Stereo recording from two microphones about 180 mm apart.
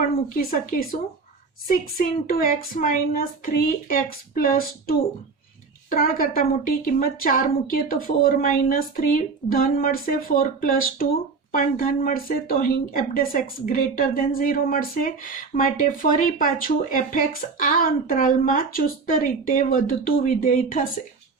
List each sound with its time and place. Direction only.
0.5 s speech: 50° left (ahead or behind)